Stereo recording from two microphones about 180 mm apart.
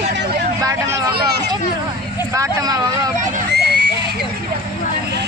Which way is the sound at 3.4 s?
65° right (ahead or behind).